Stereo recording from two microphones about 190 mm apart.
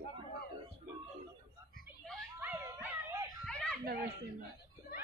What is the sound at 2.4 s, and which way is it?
Music, 15° right (ahead or behind).